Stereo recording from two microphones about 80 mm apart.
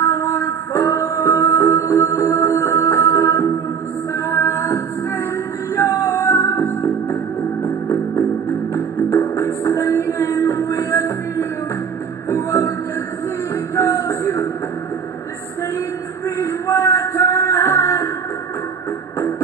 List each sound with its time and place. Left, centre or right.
0.0 s music: left
13.7 s music: left
16.3 s music: left